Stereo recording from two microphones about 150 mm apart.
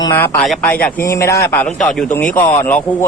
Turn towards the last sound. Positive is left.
turn(degrees=15)  # may be behind; listen again after turning